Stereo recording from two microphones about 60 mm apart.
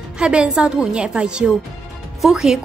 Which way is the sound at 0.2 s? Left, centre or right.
Centre.